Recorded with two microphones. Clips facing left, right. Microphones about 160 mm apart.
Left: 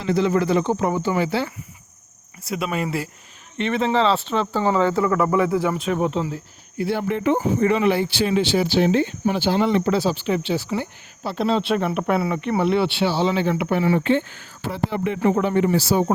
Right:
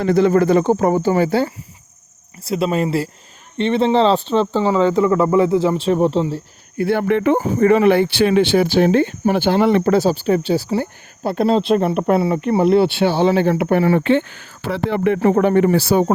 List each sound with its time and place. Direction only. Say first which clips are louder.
0.0 s speech: right 6 dB; 50° right (ahead or behind)
2.4 s speech: right 7 dB; 35° right (ahead or behind)
4.5 s speech: right 2 dB; 15° right (ahead or behind)
6.7 s speech: right 6 dB; 55° right (ahead or behind)